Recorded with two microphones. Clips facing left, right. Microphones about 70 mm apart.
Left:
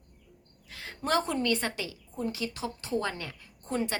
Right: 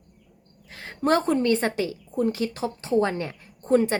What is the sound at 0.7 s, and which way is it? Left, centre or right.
A woman's voice, right.